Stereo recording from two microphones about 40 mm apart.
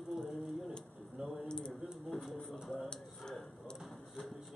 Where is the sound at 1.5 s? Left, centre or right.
Left.